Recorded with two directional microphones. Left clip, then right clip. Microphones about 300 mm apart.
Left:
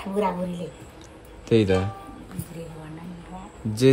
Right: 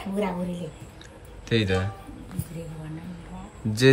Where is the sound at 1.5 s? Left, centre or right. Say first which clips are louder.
Left 5 dB; centre.